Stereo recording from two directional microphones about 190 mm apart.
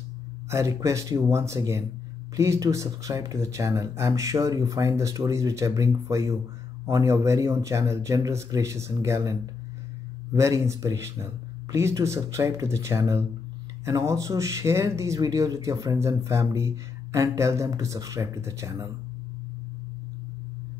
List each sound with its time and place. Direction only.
0.5 s speech: 15° right (ahead or behind)